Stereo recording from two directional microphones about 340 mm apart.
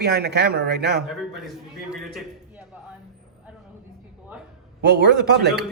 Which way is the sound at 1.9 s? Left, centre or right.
Centre.